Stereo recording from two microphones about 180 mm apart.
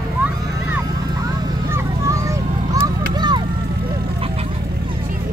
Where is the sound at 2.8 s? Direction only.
25° right (ahead or behind).